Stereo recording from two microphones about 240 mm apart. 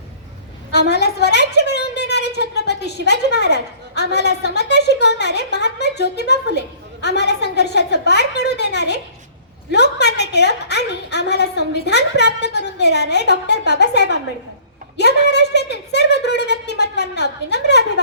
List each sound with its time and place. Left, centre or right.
0.7 s a woman's voice: left